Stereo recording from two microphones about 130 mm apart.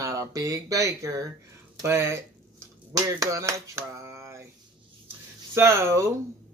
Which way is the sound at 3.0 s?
25° right (ahead or behind).